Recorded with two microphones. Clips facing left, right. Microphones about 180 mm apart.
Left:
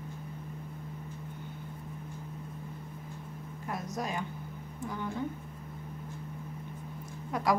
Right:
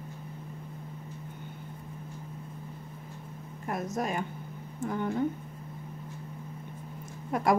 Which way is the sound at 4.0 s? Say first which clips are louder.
Right 3 dB; 55° right (ahead or behind).